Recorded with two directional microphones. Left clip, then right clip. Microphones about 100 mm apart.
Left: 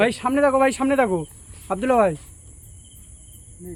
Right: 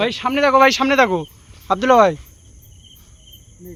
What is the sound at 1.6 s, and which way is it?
Speech, 50° right (ahead or behind).